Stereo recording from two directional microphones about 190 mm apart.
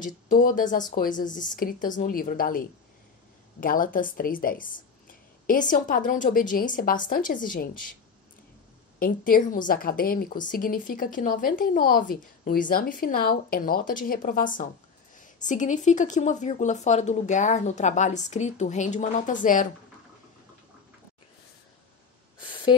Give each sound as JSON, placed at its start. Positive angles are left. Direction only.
{"t": 0.0, "sound": "speech", "side_deg": 45}
{"t": 3.6, "sound": "speech", "side_deg": 45}
{"t": 9.0, "sound": "speech", "side_deg": 45}